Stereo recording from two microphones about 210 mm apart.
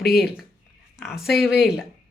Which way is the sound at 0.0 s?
50° left (ahead or behind).